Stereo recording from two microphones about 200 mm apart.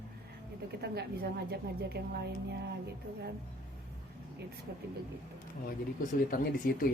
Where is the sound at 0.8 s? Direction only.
55° right (ahead or behind).